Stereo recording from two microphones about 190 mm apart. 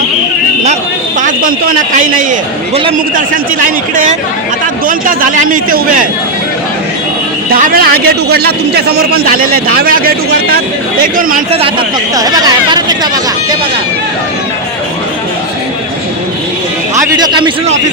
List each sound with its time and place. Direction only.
1.2 s a man's voice: 45° right (ahead or behind)
4.9 s a man's voice: 45° right (ahead or behind)
7.5 s a man's voice: 50° right (ahead or behind)
12.1 s speech: 20° right (ahead or behind)
17.2 s a man's voice: 25° right (ahead or behind)